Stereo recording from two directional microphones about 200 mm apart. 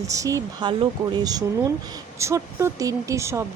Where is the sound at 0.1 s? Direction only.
15° right (ahead or behind).